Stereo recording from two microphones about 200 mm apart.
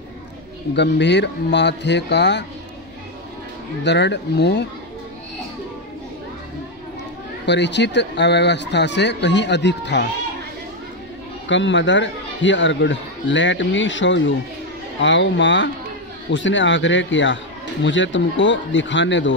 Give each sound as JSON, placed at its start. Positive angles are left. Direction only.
{"t": 0.7, "sound": "a man's voice", "side_deg": 60}
{"t": 3.8, "sound": "a man's voice", "side_deg": 60}
{"t": 7.4, "sound": "a man's voice", "side_deg": 60}
{"t": 11.4, "sound": "a man's voice", "side_deg": 65}